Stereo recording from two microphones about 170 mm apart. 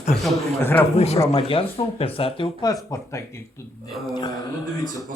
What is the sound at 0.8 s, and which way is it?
Speech, 35° left (ahead or behind).